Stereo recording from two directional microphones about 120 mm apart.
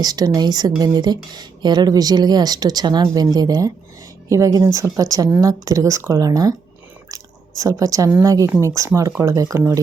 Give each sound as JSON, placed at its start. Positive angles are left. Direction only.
{"t": 0.0, "sound": "speech", "side_deg": -30}